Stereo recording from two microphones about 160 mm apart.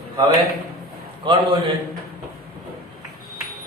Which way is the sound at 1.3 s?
30° right (ahead or behind).